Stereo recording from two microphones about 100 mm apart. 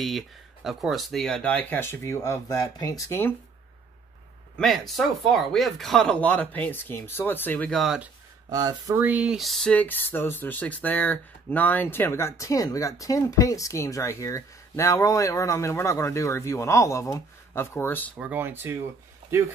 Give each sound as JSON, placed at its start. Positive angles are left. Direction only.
{"t": 0.7, "sound": "speech", "side_deg": 0}
{"t": 3.1, "sound": "speech", "side_deg": 20}
{"t": 4.6, "sound": "speech", "side_deg": 0}
{"t": 6.1, "sound": "speech", "side_deg": 15}
{"t": 7.7, "sound": "speech", "side_deg": 0}
{"t": 8.5, "sound": "speech", "side_deg": -40}
{"t": 8.9, "sound": "speech", "side_deg": -15}
{"t": 9.8, "sound": "speech", "side_deg": 20}
{"t": 18.1, "sound": "speech", "side_deg": -15}